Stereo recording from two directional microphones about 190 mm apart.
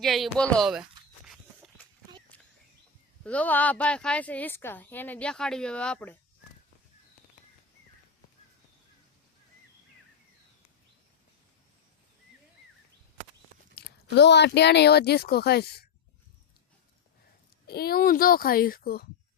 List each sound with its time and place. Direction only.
0.0 s a sound: centre (ahead or behind)
3.2 s a woman's voice: 10° left (ahead or behind)
13.7 s speech: 60° left (ahead or behind)
17.7 s a child's voice: 55° left (ahead or behind)